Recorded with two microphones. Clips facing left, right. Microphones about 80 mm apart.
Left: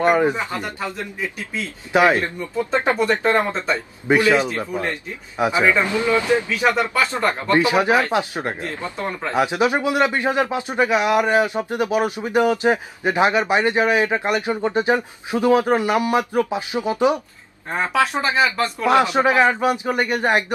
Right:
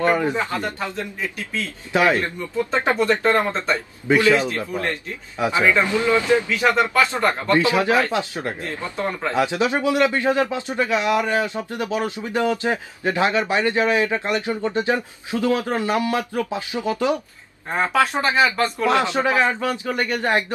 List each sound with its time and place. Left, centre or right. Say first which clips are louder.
0.0 s speech: left 2 dB; left
18.2 s speech: right 1 dB; centre
18.9 s speech: left 5 dB; centre